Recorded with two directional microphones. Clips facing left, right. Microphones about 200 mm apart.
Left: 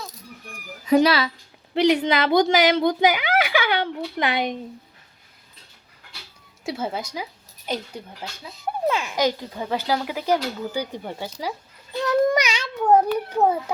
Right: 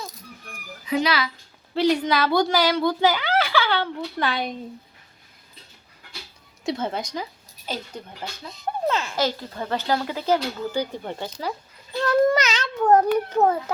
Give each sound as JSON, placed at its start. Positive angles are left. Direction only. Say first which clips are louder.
{"t": 0.9, "sound": "speech", "louder": "left 7 dB", "side_deg": 40}
{"t": 1.7, "sound": "speech", "louder": "left 2 dB", "side_deg": 20}
{"t": 6.7, "sound": "speech", "louder": "right 1 dB", "side_deg": 5}